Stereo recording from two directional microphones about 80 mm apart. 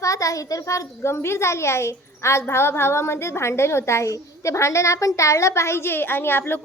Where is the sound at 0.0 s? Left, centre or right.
Left.